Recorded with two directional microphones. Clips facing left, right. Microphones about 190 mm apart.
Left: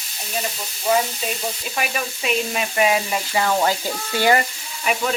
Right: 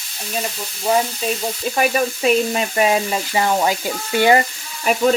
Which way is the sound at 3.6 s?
20° right (ahead or behind).